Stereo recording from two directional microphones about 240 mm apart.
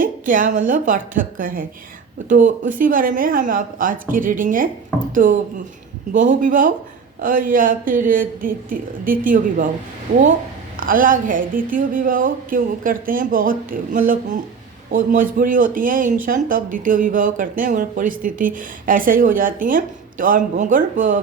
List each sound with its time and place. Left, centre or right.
0.0 s a sound: right
0.7 s speech: right
10.8 s speech: right